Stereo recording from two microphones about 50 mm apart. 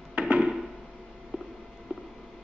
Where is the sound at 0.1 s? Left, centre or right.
Right.